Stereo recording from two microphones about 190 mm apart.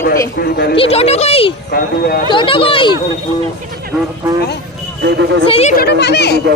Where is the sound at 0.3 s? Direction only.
55° left (ahead or behind).